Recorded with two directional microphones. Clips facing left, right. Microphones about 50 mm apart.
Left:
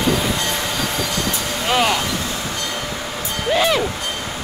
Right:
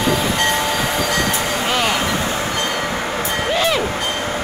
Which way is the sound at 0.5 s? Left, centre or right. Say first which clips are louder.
Right 4 dB; centre.